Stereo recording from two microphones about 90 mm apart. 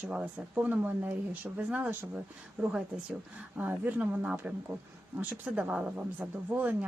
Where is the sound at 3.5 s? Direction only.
20° right (ahead or behind).